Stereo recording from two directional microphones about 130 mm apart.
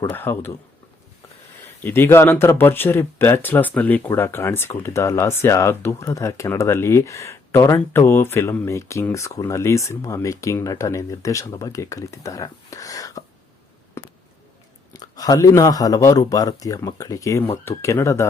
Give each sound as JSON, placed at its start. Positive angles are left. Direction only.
{"t": 0.0, "sound": "speech", "side_deg": 15}
{"t": 1.8, "sound": "speech", "side_deg": 15}
{"t": 14.0, "sound": "a sound", "side_deg": 20}
{"t": 14.9, "sound": "speech", "side_deg": 30}